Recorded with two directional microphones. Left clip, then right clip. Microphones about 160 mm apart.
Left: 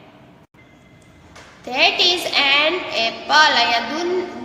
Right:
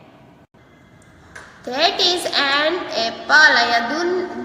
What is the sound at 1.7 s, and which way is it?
A child's voice, 20° right (ahead or behind).